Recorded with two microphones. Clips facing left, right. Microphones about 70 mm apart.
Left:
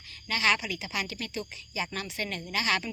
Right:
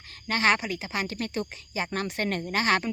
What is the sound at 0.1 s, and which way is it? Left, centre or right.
Speech, right.